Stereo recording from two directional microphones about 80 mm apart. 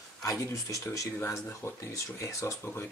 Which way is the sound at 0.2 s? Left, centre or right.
Left.